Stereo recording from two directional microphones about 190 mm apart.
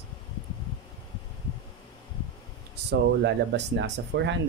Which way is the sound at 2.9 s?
65° right (ahead or behind).